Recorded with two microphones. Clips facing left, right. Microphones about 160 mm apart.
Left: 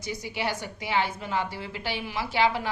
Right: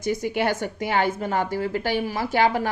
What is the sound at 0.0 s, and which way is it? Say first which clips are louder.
A woman's voice: right 8 dB; 50° right (ahead or behind).